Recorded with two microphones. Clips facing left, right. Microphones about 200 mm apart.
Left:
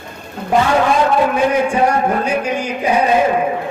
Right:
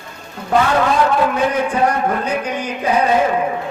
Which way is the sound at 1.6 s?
10° left (ahead or behind).